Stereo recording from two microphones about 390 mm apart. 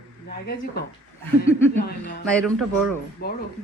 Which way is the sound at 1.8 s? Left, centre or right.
Left.